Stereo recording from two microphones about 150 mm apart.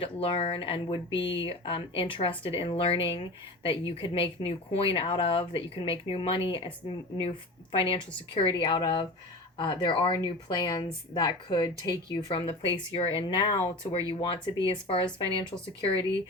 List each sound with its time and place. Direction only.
0.0 s speech: 40° left (ahead or behind)